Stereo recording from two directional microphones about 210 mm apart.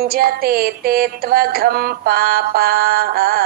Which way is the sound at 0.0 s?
45° right (ahead or behind).